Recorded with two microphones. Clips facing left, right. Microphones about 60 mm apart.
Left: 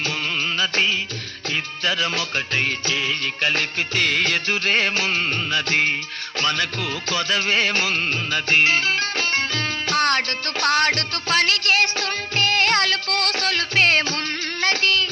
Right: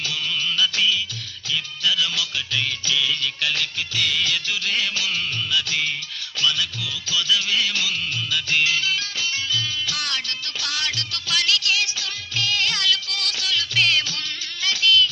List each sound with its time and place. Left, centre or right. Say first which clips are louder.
0.0 s music: left 2 dB; left